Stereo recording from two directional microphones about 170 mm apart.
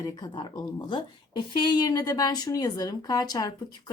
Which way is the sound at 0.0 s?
25° left (ahead or behind).